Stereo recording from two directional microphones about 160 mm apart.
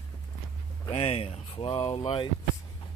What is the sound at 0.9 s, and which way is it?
Speech, 40° left (ahead or behind).